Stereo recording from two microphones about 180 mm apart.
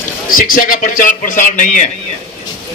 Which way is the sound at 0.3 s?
50° left (ahead or behind).